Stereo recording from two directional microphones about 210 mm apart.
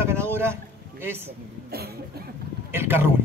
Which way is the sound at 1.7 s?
50° right (ahead or behind).